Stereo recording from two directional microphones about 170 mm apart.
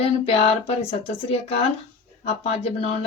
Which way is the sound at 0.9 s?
35° left (ahead or behind).